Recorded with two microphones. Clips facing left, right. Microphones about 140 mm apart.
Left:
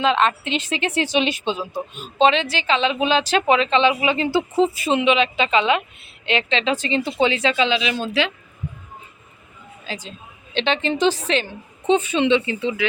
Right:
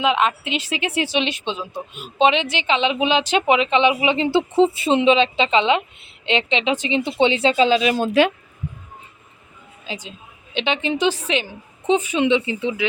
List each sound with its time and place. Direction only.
0.0 s a woman's voice: 10° right (ahead or behind)
1.5 s speech: 5° left (ahead or behind)
2.1 s a woman's voice: 15° right (ahead or behind); by 8.3 s 50° right (ahead or behind)
9.8 s a woman's voice: 15° right (ahead or behind)